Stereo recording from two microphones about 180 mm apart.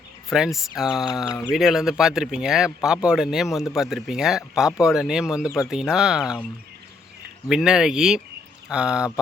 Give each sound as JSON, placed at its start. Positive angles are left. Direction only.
{"t": 0.3, "sound": "speech", "side_deg": 0}
{"t": 1.3, "sound": "speech", "side_deg": 15}
{"t": 1.5, "sound": "speech", "side_deg": 0}
{"t": 7.4, "sound": "speech", "side_deg": -5}